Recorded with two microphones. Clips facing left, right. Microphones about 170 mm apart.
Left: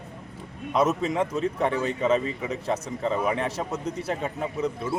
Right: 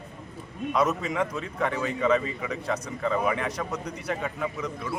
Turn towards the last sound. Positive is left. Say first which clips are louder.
# left 4 dB
turn(degrees=25)  # may be behind; listen again after turning